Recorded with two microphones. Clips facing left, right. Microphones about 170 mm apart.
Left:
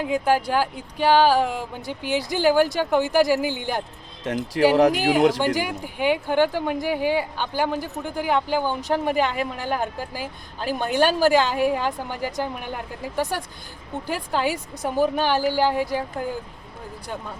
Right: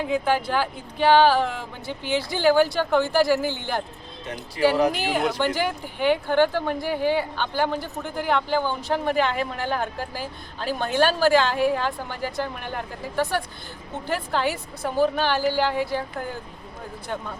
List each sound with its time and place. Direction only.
0.0 s speech: 10° left (ahead or behind)
4.3 s speech: 90° left
4.9 s speech: 45° left (ahead or behind)
5.4 s speech: 10° left (ahead or behind)